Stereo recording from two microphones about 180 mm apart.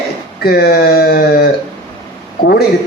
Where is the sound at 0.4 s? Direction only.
60° left (ahead or behind).